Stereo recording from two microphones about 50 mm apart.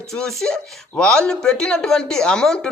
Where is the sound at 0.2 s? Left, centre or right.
Centre.